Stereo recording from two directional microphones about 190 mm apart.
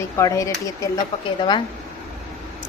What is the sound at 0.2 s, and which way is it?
A woman's voice, 15° left (ahead or behind).